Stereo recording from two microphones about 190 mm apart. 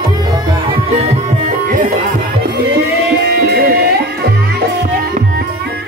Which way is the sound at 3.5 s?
55° right (ahead or behind).